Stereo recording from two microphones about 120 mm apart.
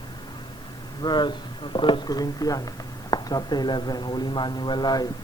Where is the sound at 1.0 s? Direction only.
40° left (ahead or behind).